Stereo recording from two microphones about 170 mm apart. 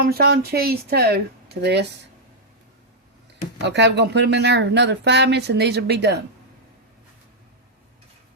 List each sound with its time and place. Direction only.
0.0 s speech: 65° right (ahead or behind); by 1.9 s 80° right
3.6 s speech: 90° right